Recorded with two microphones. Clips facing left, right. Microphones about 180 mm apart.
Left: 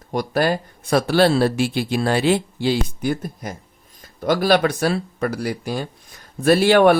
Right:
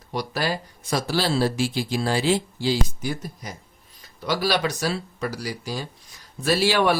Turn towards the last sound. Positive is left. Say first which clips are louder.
# left 7 dB
turn(degrees=55)  # may be behind; listen again after turning